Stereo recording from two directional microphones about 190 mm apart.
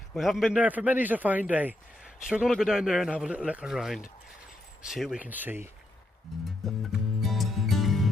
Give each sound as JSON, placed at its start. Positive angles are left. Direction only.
{"t": 0.1, "sound": "speech", "side_deg": 0}
{"t": 6.7, "sound": "music", "side_deg": 0}